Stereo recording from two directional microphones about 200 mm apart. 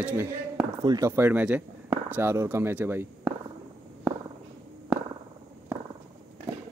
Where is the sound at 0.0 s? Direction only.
5° right (ahead or behind).